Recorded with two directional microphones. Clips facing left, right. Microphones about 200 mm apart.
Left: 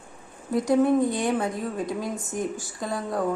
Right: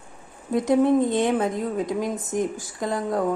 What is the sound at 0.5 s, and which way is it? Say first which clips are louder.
A woman's voice: right 2 dB; 20° right (ahead or behind).